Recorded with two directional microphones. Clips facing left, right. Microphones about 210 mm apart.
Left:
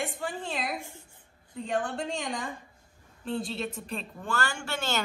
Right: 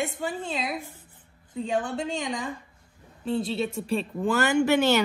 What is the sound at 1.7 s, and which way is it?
A woman's voice, 5° right (ahead or behind).